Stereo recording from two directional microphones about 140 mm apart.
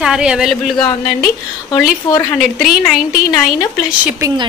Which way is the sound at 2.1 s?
25° left (ahead or behind).